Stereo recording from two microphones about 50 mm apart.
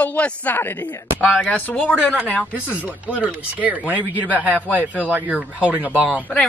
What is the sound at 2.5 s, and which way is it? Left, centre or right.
Speech, right.